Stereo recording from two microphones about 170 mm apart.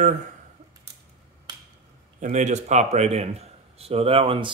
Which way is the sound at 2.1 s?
45° right (ahead or behind).